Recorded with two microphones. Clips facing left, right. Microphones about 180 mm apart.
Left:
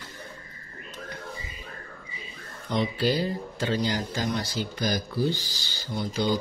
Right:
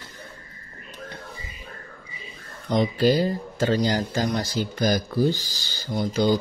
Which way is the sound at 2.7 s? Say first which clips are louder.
Right 5 dB; 45° right (ahead or behind).